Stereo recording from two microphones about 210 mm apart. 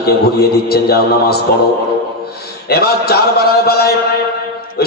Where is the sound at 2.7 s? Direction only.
50° left (ahead or behind).